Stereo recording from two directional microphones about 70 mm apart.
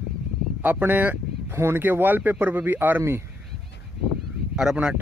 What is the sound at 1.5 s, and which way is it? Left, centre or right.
Speech, right.